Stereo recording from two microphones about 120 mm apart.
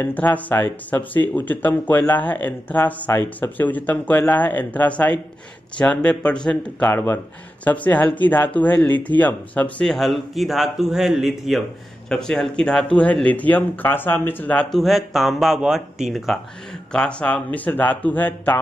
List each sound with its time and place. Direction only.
0.0 s speech: 15° left (ahead or behind)